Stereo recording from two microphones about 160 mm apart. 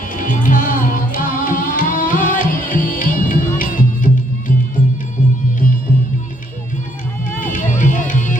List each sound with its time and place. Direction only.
0.1 s music: 55° left (ahead or behind)
7.3 s music: 55° left (ahead or behind)